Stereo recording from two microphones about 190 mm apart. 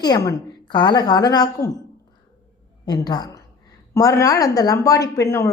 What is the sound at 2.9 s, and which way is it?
A woman's voice, 20° left (ahead or behind).